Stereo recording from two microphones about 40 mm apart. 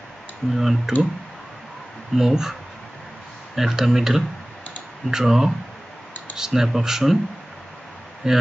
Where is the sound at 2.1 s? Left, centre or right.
Centre.